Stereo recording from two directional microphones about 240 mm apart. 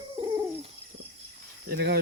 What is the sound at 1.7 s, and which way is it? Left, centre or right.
Speech, right.